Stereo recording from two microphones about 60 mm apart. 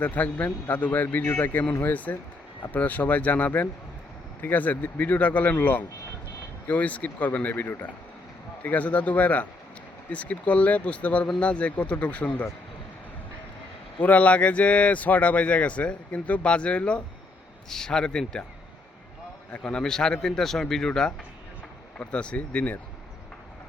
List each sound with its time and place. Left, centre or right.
0.0 s a man's voice: left
1.9 s speech: left
8.6 s speech: left
14.0 s speech: left
19.5 s speech: centre